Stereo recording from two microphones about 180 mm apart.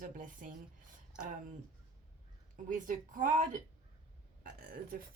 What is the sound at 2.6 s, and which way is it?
Speech, 50° right (ahead or behind).